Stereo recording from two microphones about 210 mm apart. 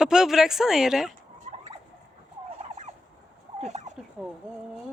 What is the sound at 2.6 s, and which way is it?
Fowl, 30° right (ahead or behind).